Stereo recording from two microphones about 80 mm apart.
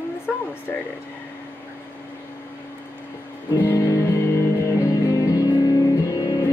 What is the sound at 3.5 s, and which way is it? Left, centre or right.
Music, left.